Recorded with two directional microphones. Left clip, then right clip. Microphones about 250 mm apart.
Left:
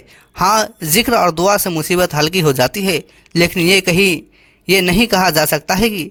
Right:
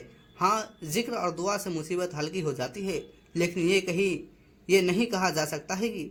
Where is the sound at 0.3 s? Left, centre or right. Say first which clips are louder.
Left 13 dB; left.